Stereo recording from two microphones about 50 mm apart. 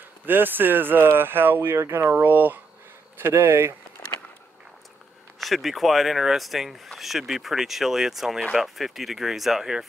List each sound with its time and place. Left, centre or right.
0.2 s speech: right
5.4 s speech: centre